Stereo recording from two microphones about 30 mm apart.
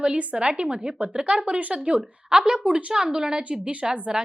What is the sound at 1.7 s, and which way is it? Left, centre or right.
Speech, right.